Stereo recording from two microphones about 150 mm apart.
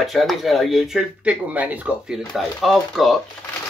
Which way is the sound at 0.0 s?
Centre (ahead or behind).